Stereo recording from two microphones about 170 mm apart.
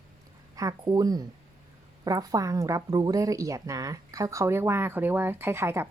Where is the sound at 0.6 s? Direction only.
20° right (ahead or behind).